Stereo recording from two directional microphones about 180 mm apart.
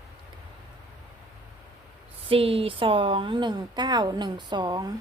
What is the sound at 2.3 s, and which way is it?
A woman's voice, 30° right (ahead or behind).